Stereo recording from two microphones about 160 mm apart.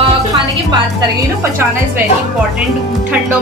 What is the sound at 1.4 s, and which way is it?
Speech, 15° right (ahead or behind).